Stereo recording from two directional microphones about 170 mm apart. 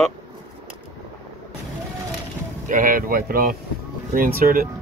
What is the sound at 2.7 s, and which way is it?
Speech, 50° right (ahead or behind).